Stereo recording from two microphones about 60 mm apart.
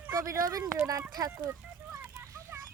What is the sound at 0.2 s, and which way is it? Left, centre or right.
Speech, right.